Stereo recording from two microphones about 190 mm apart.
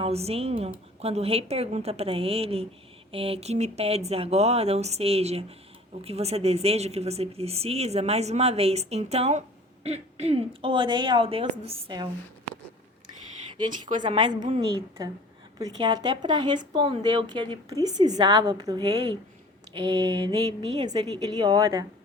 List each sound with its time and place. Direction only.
0.0 s a woman's voice: 30° right (ahead or behind)
13.7 s a woman's voice: 25° right (ahead or behind)
15.5 s a woman's voice: 20° right (ahead or behind)